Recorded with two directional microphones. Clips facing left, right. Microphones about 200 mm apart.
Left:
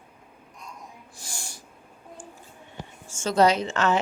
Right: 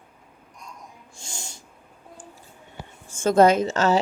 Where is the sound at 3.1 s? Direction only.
55° right (ahead or behind); by 4.0 s 40° right (ahead or behind).